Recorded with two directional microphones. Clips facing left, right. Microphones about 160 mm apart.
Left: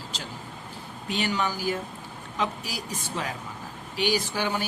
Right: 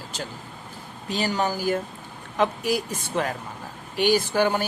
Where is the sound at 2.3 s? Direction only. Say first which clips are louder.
Right 8 dB; 55° right (ahead or behind).